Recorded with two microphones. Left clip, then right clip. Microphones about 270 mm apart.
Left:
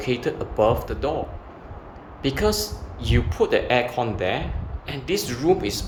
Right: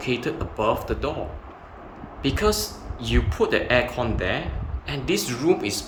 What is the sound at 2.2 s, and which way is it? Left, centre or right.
Speech, centre.